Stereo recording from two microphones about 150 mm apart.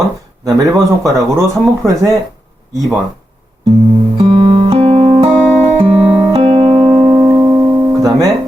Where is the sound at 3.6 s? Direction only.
25° right (ahead or behind).